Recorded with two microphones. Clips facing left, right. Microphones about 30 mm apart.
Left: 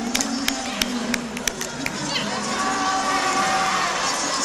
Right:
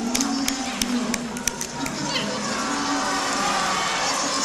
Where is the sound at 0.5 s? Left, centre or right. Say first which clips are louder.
Left 1 dB; left.